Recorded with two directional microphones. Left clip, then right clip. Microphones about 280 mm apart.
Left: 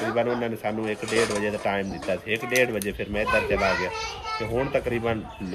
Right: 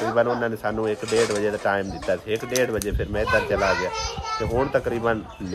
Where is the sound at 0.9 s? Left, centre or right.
Right.